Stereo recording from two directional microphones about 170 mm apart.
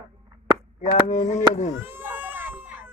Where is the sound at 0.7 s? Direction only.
45° left (ahead or behind).